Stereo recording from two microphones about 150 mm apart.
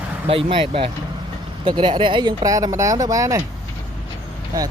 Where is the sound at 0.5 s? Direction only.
40° right (ahead or behind); by 3.4 s 20° right (ahead or behind).